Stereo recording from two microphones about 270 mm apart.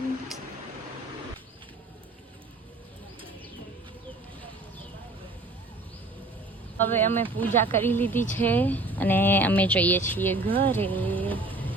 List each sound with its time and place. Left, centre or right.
6.7 s speech: centre
10.4 s speech: centre
10.7 s speech: centre